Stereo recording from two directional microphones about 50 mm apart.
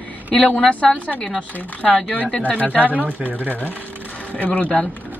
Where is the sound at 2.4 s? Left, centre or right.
Left.